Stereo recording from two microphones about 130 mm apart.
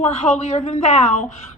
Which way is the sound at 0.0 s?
60° left (ahead or behind).